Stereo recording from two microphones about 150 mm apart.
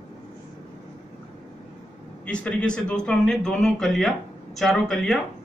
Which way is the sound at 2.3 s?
5° left (ahead or behind).